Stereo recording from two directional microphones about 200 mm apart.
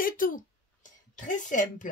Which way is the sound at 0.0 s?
45° left (ahead or behind).